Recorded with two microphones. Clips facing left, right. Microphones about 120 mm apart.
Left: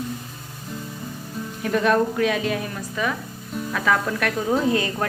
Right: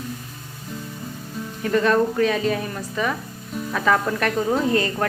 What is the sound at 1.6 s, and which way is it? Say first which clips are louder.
Speech: right 1 dB; 5° left (ahead or behind).